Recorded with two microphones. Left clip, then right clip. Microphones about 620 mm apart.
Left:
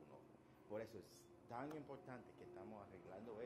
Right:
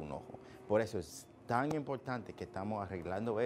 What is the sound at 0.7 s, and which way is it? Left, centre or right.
A man's voice, right.